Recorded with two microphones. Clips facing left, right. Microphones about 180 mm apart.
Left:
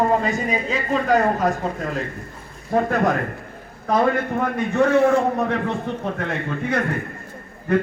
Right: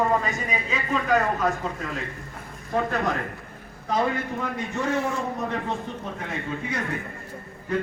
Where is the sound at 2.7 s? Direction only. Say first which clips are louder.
Left 6 dB; 55° left (ahead or behind).